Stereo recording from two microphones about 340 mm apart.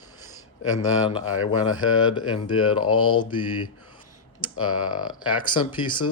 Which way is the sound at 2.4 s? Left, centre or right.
Left.